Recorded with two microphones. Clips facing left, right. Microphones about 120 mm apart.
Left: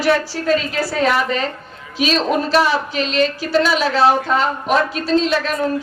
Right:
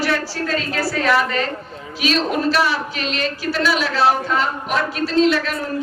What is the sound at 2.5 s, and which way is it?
A man's voice, 25° left (ahead or behind).